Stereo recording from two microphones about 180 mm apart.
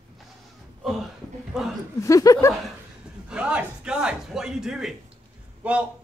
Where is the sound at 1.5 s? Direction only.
Centre (ahead or behind).